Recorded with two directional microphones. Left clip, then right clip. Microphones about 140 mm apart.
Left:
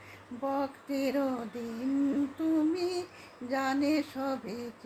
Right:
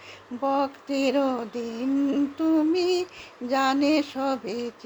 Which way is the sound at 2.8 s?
45° right (ahead or behind).